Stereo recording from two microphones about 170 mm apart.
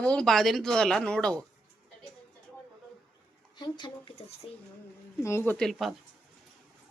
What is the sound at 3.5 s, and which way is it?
Speech, 25° left (ahead or behind).